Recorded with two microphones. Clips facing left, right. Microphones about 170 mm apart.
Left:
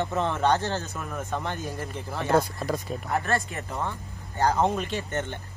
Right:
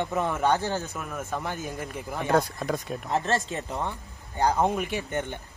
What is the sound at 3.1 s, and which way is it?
Speech, 20° right (ahead or behind).